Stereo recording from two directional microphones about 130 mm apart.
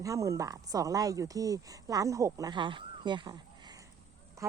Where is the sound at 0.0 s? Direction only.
25° right (ahead or behind).